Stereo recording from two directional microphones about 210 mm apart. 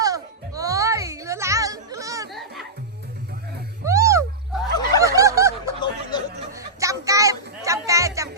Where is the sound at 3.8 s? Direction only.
15° right (ahead or behind).